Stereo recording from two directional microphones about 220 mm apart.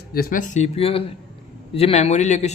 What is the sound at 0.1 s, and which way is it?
Speech, 40° left (ahead or behind).